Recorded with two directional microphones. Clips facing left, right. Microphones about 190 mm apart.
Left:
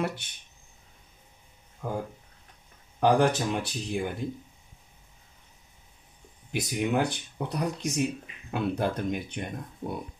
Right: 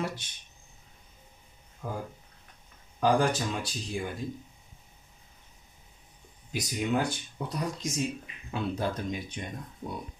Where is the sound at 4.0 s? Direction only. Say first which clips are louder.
Left 3 dB; 60° left (ahead or behind).